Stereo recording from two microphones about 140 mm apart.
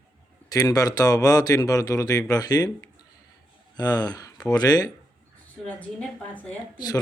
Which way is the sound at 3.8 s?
30° left (ahead or behind).